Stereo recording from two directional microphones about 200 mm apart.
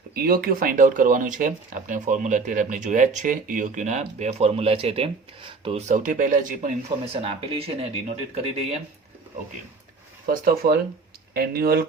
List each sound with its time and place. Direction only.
0.1 s speech: 50° right (ahead or behind); by 8.8 s 30° right (ahead or behind)
10.2 s speech: 45° right (ahead or behind)